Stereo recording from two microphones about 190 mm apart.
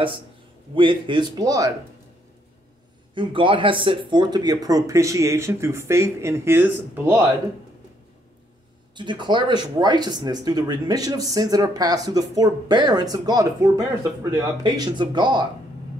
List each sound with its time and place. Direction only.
0.7 s speech: 25° right (ahead or behind)
3.2 s speech: 25° right (ahead or behind); by 7.2 s 10° right (ahead or behind)
8.9 s speech: 25° right (ahead or behind)